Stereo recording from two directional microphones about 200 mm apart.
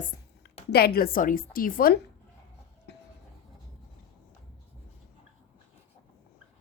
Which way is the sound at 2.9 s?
55° left (ahead or behind).